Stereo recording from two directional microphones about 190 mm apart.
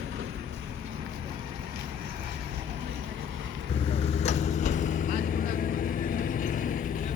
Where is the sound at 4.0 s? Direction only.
35° left (ahead or behind).